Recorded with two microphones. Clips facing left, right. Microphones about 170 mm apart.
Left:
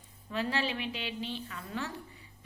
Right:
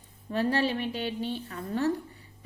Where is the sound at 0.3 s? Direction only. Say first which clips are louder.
Right 6 dB; 45° right (ahead or behind).